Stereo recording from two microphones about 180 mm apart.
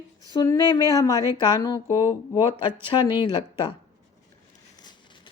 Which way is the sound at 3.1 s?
25° left (ahead or behind).